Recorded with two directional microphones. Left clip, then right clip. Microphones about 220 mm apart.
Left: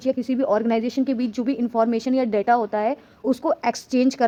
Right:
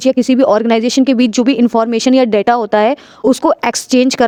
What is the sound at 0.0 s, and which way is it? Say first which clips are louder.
Speech: right 12 dB; 40° right (ahead or behind).